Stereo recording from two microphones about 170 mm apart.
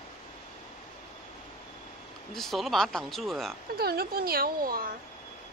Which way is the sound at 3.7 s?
65° right (ahead or behind).